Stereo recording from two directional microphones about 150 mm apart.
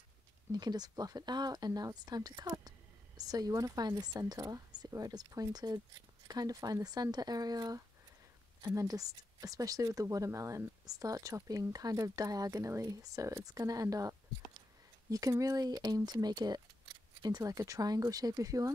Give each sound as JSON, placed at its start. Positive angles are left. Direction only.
{"t": 0.5, "sound": "speech", "side_deg": -25}